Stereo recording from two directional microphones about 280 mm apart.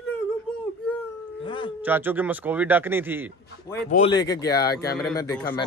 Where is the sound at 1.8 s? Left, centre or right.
Centre.